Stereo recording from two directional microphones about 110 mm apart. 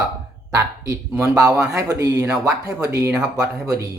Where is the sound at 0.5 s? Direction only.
25° right (ahead or behind).